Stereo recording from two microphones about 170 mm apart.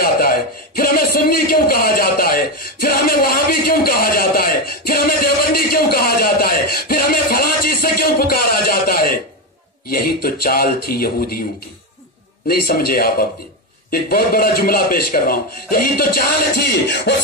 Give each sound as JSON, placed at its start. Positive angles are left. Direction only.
{"t": 0.0, "sound": "a man's voice", "side_deg": 60}
{"t": 12.4, "sound": "a man's voice", "side_deg": 65}